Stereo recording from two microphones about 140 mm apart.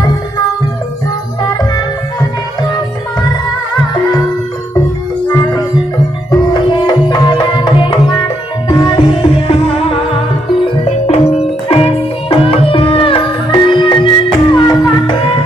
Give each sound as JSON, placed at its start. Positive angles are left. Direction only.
{"t": 5.3, "sound": "music", "side_deg": 25}